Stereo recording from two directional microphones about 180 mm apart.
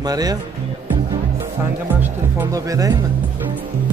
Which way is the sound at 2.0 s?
15° right (ahead or behind).